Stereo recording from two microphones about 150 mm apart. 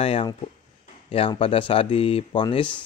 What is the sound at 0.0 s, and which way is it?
Speech, 35° left (ahead or behind).